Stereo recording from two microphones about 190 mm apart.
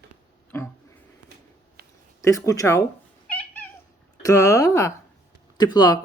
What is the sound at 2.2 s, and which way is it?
Speech, 15° left (ahead or behind).